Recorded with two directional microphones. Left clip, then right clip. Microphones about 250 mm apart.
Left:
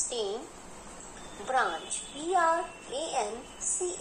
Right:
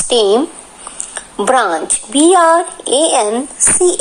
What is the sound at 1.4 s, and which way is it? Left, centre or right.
Speech, right.